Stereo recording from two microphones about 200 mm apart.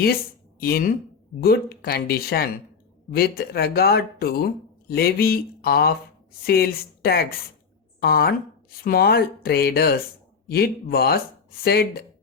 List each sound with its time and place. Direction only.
0.6 s speech: 50° left (ahead or behind)